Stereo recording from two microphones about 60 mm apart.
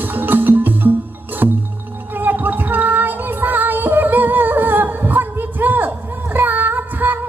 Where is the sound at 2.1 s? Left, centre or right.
Right.